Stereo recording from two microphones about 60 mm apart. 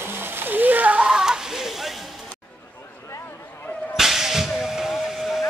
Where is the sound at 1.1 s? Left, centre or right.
Centre.